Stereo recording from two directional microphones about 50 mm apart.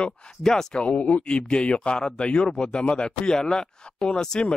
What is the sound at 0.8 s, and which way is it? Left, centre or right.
Speech, left.